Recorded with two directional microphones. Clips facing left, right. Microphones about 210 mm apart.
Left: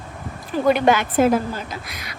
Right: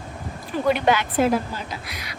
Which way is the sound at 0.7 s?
45° left (ahead or behind).